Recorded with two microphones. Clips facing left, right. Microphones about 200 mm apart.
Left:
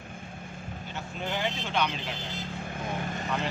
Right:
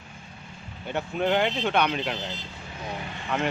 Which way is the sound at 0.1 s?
50° left (ahead or behind).